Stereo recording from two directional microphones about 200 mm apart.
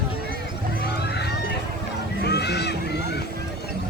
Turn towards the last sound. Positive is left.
turn(degrees=55)  # may be behind; listen again after turning